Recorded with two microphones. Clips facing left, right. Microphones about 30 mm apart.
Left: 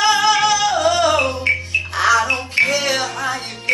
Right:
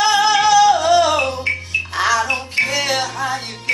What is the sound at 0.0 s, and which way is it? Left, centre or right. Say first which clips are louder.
Yodeling: even; centre.